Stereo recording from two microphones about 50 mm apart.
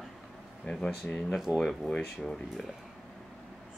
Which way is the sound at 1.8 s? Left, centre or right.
Centre.